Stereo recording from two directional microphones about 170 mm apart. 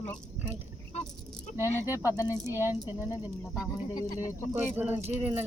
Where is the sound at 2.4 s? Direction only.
15° right (ahead or behind).